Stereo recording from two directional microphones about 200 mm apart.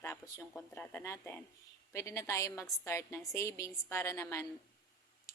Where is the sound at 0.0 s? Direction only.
15° left (ahead or behind).